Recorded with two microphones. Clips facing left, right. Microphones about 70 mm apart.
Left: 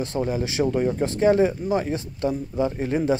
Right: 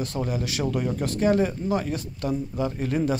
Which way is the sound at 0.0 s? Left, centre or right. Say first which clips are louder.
Left 3 dB; left.